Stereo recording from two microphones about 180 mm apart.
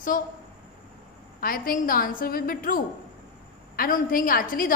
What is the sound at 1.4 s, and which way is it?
A woman's voice, 50° left (ahead or behind).